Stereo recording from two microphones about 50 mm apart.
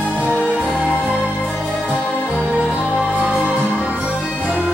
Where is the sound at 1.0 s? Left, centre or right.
Centre.